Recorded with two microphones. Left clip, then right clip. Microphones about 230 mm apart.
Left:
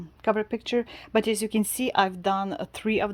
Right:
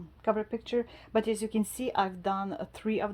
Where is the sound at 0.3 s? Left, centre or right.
Left.